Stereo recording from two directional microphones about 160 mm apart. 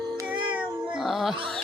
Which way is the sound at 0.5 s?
5° right (ahead or behind).